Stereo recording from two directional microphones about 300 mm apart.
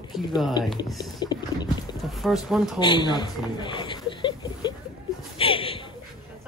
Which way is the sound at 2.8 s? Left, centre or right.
Centre.